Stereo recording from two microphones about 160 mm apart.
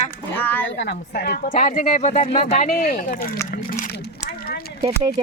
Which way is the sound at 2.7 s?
60° left (ahead or behind).